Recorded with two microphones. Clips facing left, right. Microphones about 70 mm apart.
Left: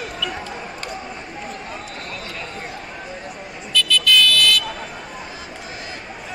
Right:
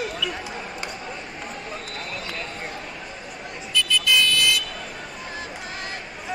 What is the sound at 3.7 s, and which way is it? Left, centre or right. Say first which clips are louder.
Car alarm: left 4 dB; right.